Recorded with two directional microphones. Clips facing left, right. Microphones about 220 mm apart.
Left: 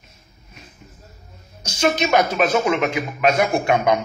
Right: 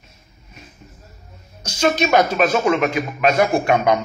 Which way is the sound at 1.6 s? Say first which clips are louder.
Right 1 dB; 20° left (ahead or behind).